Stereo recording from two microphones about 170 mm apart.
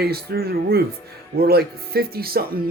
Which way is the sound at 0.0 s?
65° right (ahead or behind).